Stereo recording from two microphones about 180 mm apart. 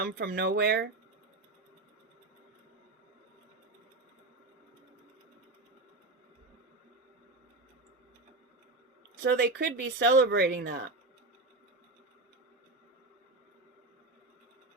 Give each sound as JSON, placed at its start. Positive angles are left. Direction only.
{"t": 0.0, "sound": "speech", "side_deg": -60}
{"t": 9.3, "sound": "speech", "side_deg": -60}
{"t": 10.2, "sound": "speech", "side_deg": -60}